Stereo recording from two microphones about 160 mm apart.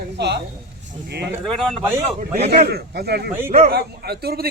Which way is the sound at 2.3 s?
80° right.